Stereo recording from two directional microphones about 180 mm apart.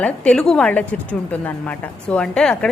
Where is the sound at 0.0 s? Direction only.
5° left (ahead or behind).